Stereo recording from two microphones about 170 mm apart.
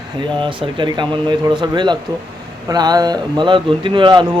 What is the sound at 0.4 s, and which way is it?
Speech, 25° right (ahead or behind).